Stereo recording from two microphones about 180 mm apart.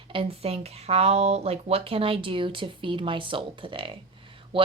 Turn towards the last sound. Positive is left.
turn(degrees=-30)  # may be behind; listen again after turning